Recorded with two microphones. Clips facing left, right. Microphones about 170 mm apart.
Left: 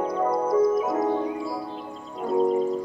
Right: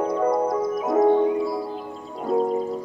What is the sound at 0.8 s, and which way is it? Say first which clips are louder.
Music: right 6 dB; 25° right (ahead or behind).